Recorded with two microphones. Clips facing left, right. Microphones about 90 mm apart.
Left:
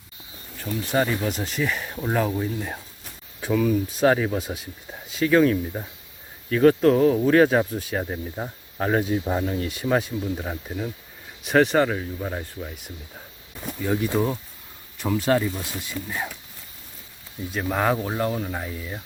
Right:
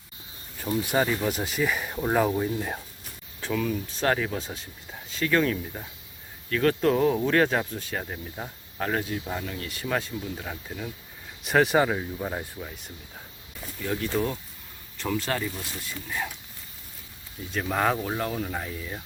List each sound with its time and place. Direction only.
0.6 s speech: 10° right (ahead or behind)
3.4 s speech: 5° left (ahead or behind)
6.9 s speech: centre (ahead or behind); by 9.6 s 30° left (ahead or behind)
9.6 s speech: 20° left (ahead or behind)
11.4 s speech: centre (ahead or behind)
12.5 s speech: 5° left (ahead or behind)
17.5 s speech: 5° left (ahead or behind)